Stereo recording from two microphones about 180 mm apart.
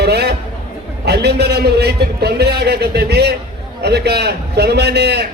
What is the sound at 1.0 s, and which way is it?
A man's voice, 65° right (ahead or behind).